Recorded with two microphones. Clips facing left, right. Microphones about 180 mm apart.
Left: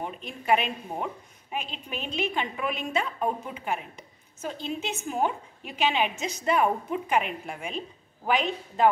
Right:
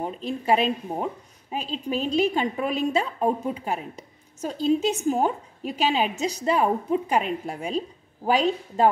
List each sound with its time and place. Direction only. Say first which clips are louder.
0.0 s a woman's voice: right 6 dB; 35° right (ahead or behind)